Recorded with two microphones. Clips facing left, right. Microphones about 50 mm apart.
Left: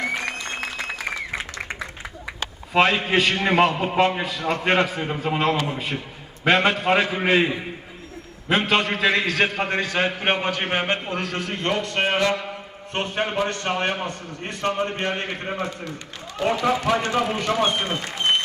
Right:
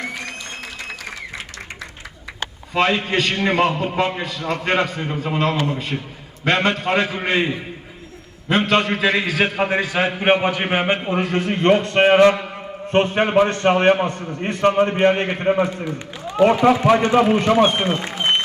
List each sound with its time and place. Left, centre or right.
0.2 s music: left
2.7 s a man's voice: centre; by 18.3 s right